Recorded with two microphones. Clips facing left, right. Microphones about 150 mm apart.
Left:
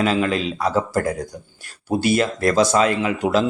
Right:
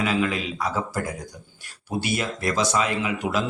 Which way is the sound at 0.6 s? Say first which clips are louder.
Left 7 dB; 45° left (ahead or behind).